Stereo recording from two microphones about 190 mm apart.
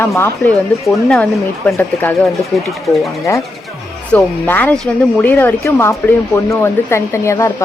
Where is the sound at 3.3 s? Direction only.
15° left (ahead or behind).